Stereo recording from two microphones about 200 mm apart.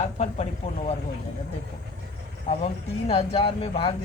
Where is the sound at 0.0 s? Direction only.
35° left (ahead or behind).